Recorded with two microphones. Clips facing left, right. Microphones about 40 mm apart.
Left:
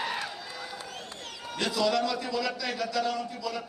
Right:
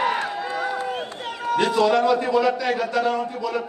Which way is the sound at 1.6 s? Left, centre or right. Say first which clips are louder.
Right 8 dB; right.